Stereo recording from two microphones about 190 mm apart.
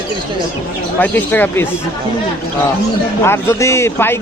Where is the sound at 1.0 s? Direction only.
10° left (ahead or behind).